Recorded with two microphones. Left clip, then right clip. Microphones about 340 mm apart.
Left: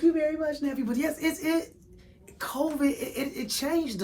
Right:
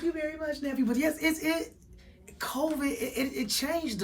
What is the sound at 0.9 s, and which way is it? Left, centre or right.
A woman's voice, centre.